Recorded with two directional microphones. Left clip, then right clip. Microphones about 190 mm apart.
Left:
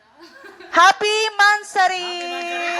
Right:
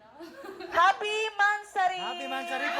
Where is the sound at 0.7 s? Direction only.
35° left (ahead or behind).